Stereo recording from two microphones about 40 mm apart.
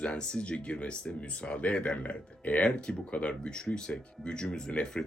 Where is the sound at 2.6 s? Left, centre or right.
Left.